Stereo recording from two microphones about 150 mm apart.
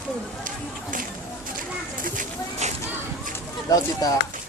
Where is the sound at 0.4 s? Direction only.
65° right (ahead or behind).